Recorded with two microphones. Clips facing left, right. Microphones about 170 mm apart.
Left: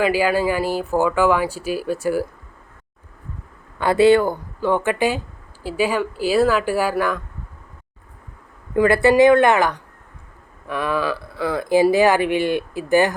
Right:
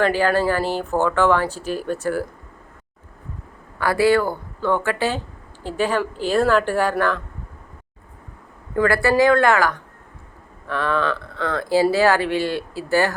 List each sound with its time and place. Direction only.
0.0 s speech: 10° left (ahead or behind)
3.8 s speech: 20° left (ahead or behind)
8.7 s speech: 20° left (ahead or behind)
10.7 s speech: 10° left (ahead or behind)